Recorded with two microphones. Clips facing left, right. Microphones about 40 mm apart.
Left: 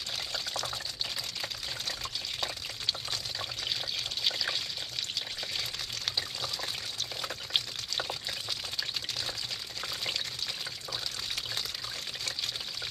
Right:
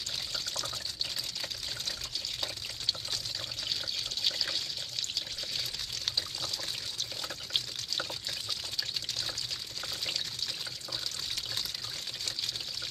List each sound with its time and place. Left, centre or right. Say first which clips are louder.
0.3 s water: left 2 dB; centre
2.4 s water: left 2 dB; centre
6.0 s water: left 1 dB; centre
9.8 s pour: left 2 dB; centre